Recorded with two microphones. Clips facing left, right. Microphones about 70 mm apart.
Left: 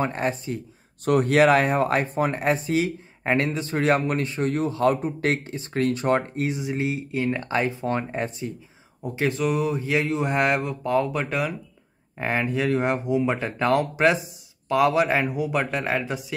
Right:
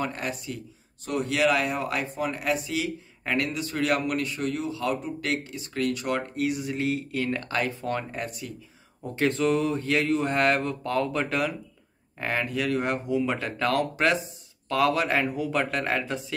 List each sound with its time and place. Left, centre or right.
0.0 s speech: left
1.0 s speech: left
9.1 s speech: centre
12.2 s speech: centre